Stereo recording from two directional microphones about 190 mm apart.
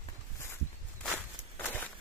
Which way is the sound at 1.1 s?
10° left (ahead or behind).